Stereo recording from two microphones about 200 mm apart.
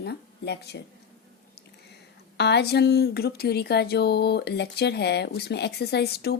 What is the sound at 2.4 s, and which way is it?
Speech, 55° left (ahead or behind).